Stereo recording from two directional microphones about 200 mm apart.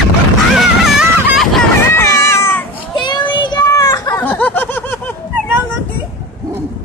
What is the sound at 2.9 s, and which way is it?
Children playing, 20° left (ahead or behind).